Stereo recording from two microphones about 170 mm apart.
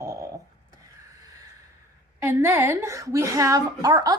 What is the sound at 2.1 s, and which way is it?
A woman's voice, 15° right (ahead or behind).